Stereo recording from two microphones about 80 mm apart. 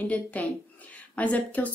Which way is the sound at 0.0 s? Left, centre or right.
Centre.